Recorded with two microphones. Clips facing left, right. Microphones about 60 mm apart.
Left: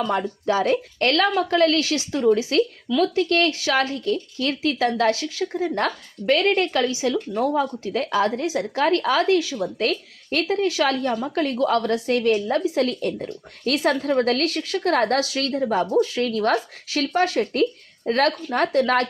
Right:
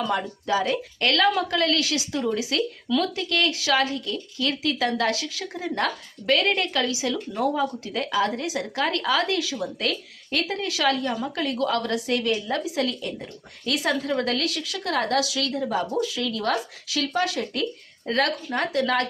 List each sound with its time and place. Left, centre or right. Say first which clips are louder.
0.4 s speech: left 4 dB; left